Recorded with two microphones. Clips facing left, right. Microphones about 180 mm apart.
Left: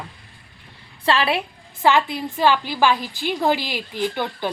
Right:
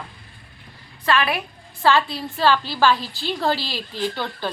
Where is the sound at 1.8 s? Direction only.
20° left (ahead or behind).